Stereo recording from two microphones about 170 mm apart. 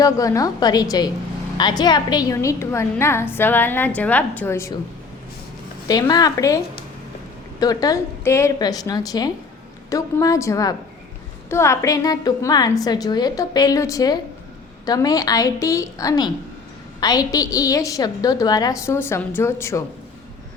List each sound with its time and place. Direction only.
0.0 s a woman's voice: 20° left (ahead or behind)
5.9 s a woman's voice: 25° left (ahead or behind)
7.6 s a woman's voice: 20° left (ahead or behind)